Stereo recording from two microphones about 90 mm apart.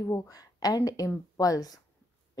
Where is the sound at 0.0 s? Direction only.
35° left (ahead or behind).